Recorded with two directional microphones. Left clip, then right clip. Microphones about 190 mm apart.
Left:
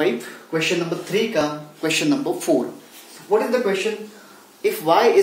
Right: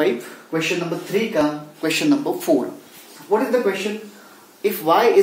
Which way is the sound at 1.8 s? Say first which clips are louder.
Right 1 dB; 15° right (ahead or behind).